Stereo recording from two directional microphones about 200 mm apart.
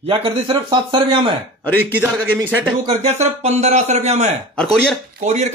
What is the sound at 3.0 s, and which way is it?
Speech, 35° right (ahead or behind).